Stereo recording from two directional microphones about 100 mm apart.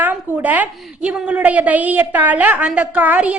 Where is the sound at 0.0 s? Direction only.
20° right (ahead or behind).